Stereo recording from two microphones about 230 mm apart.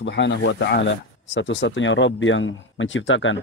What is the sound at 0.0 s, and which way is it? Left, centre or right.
Speech, left.